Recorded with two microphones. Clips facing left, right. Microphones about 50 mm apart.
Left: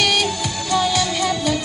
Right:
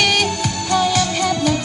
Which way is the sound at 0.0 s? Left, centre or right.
Right.